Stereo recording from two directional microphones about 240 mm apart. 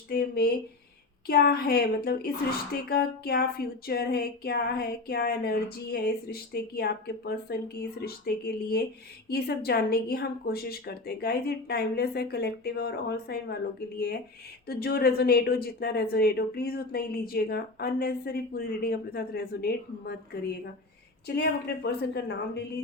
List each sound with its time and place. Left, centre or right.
0.1 s a woman's voice: left
14.7 s a woman's voice: left